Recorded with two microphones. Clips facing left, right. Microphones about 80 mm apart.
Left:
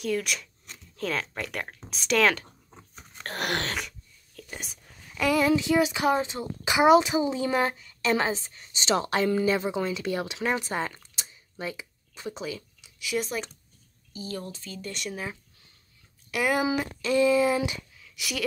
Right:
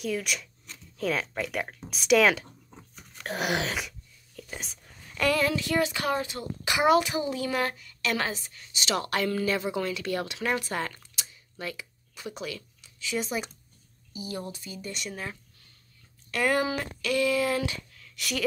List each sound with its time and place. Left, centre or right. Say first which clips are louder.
0.0 s speech: left 2 dB; centre; by 11.0 s left
11.1 s a sound: left 2 dB; left
13.1 s speech: left 1 dB; centre
14.1 s speech: even; centre
17.0 s speech: left 4 dB; left; by 18.4 s centre